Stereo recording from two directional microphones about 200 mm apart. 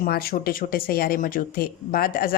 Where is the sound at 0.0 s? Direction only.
45° left (ahead or behind).